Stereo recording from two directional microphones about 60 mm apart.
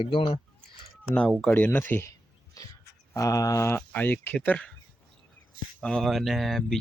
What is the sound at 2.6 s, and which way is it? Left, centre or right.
Wild animals, left.